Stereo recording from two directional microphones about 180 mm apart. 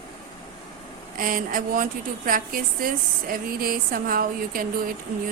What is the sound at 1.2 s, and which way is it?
A woman's voice, 50° right (ahead or behind).